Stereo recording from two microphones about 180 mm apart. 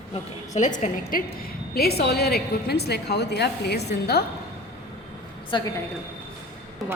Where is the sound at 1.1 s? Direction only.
50° left (ahead or behind).